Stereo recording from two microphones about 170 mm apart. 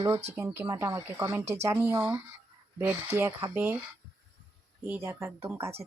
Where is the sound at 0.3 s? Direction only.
15° right (ahead or behind).